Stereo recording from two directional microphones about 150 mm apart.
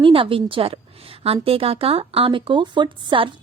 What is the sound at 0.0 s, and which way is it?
A woman's voice, 35° right (ahead or behind).